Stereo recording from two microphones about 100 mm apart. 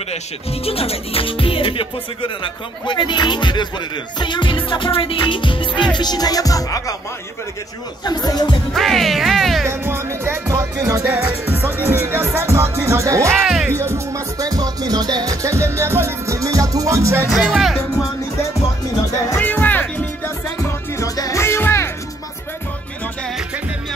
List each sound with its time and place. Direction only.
0.7 s speech: 75° left (ahead or behind); by 5.9 s 55° left (ahead or behind)
5.9 s music: 45° left (ahead or behind)
8.0 s speech: 45° left (ahead or behind)
8.7 s speech: centre (ahead or behind)
9.7 s music: 25° right (ahead or behind)
11.1 s music: 20° right (ahead or behind)
17.3 s speech: centre (ahead or behind)
19.4 s music: 15° left (ahead or behind)
20.6 s music: 30° left (ahead or behind)